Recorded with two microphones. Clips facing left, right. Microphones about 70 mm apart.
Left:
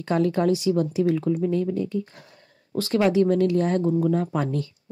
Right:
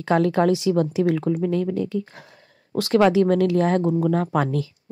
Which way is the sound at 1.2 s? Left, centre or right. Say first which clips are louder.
Right 1 dB; right.